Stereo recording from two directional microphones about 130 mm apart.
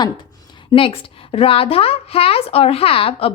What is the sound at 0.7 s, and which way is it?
A woman's voice, 40° left (ahead or behind).